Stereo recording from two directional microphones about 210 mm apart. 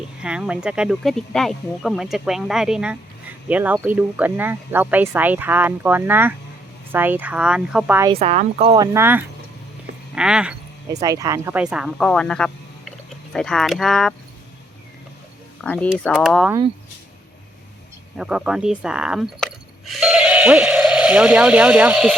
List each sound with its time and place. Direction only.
0.2 s speech: 5° right (ahead or behind)
8.1 s speech: 30° right (ahead or behind)
8.7 s speech: 15° right (ahead or behind)
11.0 s speech: 15° right (ahead or behind); by 14.1 s centre (ahead or behind)
15.6 s speech: 5° left (ahead or behind)
18.2 s speech: 5° right (ahead or behind)